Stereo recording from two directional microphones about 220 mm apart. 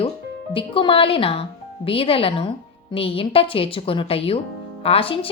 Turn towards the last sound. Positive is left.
turn(degrees=25)  # may be behind; listen again after turning